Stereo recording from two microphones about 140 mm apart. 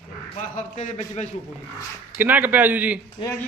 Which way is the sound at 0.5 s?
60° left (ahead or behind).